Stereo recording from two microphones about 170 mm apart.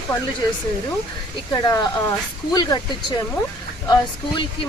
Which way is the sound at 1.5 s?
20° left (ahead or behind).